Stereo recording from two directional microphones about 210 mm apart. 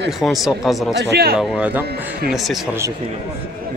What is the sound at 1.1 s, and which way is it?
Speech, 50° right (ahead or behind).